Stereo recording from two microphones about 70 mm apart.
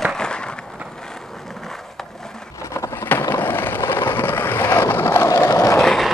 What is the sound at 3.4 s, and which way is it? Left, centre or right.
Vehicle, left.